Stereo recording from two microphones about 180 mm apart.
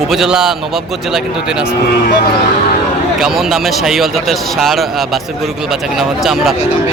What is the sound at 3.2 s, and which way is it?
Speech, centre (ahead or behind).